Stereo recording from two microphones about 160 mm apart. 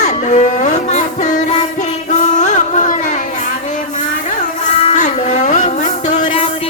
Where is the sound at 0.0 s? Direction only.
50° left (ahead or behind).